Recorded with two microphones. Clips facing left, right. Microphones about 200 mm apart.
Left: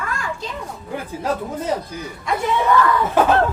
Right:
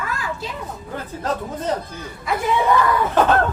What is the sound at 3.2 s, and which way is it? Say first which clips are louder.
Speech: left 1 dB; 10° left (ahead or behind).